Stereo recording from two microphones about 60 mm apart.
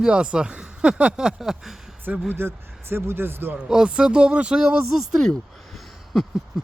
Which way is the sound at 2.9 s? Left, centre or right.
Right.